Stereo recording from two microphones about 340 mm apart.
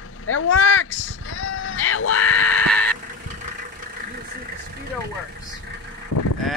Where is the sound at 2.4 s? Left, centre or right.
Centre.